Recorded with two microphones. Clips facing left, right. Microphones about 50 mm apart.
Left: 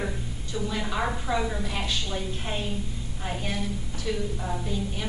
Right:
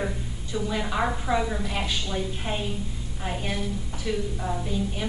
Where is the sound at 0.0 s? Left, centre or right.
Centre.